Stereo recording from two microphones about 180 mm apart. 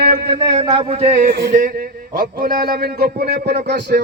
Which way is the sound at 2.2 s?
50° right (ahead or behind).